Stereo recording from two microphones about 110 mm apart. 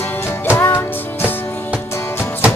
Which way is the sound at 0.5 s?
20° left (ahead or behind).